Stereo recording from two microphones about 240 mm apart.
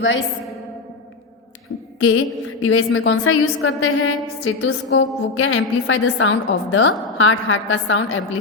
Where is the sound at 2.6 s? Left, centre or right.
Left.